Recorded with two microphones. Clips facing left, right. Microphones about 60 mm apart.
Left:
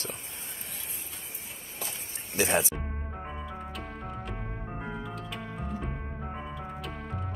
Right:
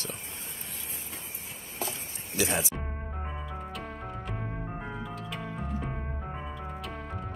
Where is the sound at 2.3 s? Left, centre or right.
Left.